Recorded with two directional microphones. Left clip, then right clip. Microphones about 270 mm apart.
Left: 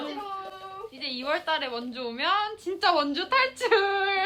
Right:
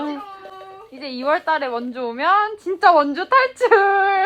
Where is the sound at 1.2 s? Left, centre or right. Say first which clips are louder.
Right 9 dB; centre.